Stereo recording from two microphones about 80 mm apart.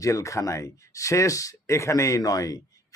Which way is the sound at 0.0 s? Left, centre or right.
Left.